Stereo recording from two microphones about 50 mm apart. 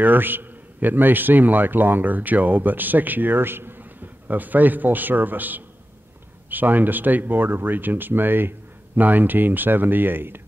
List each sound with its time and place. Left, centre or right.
0.0 s speech: right
4.3 s speech: right